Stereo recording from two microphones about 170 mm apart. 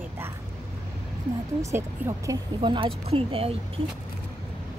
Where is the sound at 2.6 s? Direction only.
30° right (ahead or behind).